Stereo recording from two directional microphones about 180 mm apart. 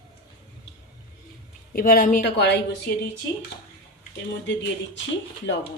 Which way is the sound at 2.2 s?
70° left (ahead or behind).